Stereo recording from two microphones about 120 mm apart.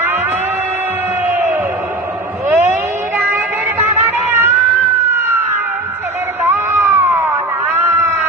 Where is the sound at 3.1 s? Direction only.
20° right (ahead or behind).